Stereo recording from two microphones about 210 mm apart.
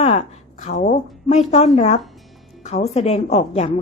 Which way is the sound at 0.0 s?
30° left (ahead or behind).